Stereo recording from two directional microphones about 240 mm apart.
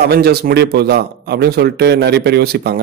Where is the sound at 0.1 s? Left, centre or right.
Right.